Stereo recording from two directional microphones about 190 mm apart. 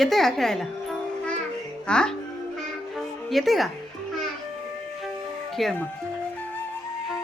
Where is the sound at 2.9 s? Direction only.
Centre (ahead or behind).